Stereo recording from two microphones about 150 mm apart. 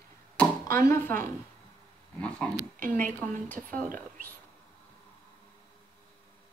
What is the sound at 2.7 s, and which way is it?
A woman's voice, 60° right (ahead or behind).